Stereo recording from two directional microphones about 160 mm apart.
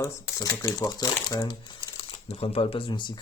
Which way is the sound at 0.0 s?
20° left (ahead or behind).